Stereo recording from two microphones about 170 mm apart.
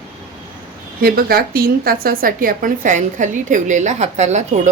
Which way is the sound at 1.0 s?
60° right (ahead or behind).